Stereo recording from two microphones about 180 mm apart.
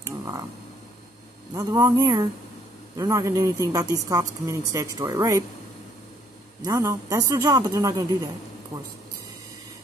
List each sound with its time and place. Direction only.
0.2 s a sound: 20° right (ahead or behind)
1.5 s speech: 20° right (ahead or behind)
6.6 s speech: 20° right (ahead or behind)